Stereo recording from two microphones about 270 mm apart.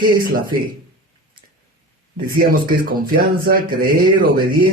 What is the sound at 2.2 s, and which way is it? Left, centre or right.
Speech, right.